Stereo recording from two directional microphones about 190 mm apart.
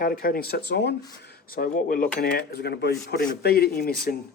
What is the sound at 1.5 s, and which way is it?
Speech, 50° left (ahead or behind).